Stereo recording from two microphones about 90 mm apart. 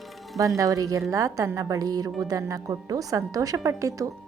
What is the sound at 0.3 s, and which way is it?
A woman's voice, 40° right (ahead or behind).